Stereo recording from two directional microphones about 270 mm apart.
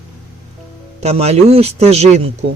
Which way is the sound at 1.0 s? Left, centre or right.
Right.